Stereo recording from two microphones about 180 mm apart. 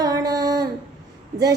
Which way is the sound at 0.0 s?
20° right (ahead or behind).